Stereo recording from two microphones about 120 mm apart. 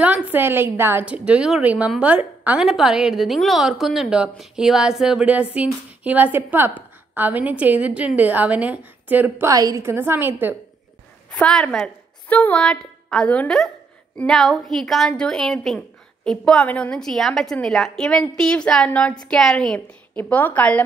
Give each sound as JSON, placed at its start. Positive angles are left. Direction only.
{"t": 0.0, "sound": "a woman's voice", "side_deg": -10}
{"t": 9.5, "sound": "a woman's voice", "side_deg": -30}
{"t": 9.8, "sound": "a woman's voice", "side_deg": -20}
{"t": 11.2, "sound": "a woman's voice", "side_deg": 10}